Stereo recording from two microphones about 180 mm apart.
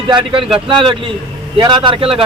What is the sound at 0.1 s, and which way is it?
Speech, 30° right (ahead or behind).